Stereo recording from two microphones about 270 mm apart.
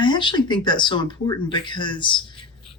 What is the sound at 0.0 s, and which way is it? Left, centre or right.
Speech, centre.